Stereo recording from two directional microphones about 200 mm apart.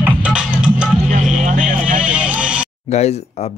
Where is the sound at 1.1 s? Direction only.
40° right (ahead or behind).